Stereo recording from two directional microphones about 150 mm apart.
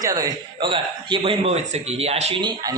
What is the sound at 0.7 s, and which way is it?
Speech, 40° right (ahead or behind).